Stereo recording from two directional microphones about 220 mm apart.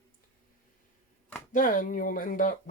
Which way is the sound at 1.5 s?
35° left (ahead or behind).